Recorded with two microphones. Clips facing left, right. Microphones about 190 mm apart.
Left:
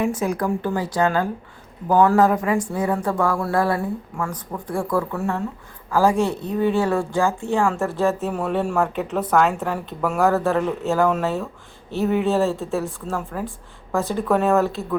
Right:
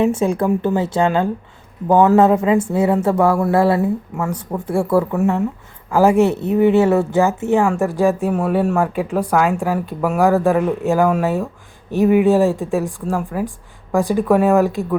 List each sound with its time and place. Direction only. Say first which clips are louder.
0.0 s speech: right 6 dB; 25° right (ahead or behind)